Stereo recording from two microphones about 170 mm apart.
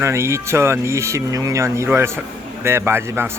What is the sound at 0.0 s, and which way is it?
Speech, 15° right (ahead or behind).